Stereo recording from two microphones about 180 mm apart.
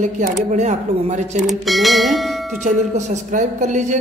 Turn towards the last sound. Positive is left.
turn(degrees=-40)  # may be behind; listen again after turning